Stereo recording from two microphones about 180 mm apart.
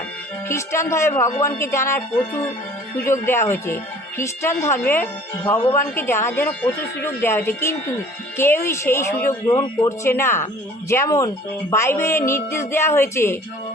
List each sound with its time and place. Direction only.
0.4 s speech: 15° left (ahead or behind)